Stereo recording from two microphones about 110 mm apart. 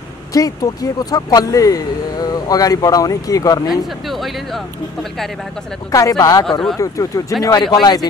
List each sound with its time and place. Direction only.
0.3 s speech: 35° left (ahead or behind)
3.6 s speech: centre (ahead or behind)
5.9 s speech: 30° left (ahead or behind)